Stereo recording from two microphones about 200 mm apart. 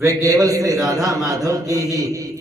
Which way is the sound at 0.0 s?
15° right (ahead or behind).